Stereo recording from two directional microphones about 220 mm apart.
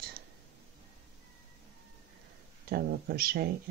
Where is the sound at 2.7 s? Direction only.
45° right (ahead or behind).